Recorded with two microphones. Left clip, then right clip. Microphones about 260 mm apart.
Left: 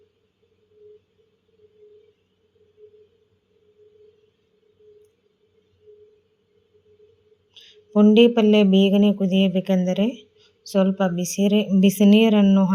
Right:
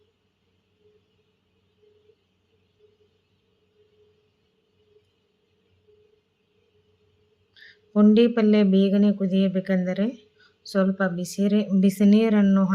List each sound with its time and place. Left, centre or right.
7.5 s speech: centre